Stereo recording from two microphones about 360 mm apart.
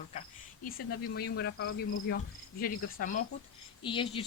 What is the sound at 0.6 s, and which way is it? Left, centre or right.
Speech, left.